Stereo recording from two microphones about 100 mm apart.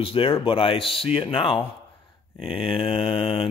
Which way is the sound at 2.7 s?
70° left (ahead or behind).